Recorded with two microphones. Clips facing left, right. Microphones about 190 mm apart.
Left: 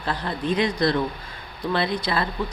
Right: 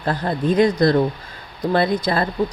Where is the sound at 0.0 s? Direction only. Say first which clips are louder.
Right 6 dB; 45° right (ahead or behind).